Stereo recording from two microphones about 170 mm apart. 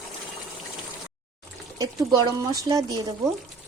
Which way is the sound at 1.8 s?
20° right (ahead or behind).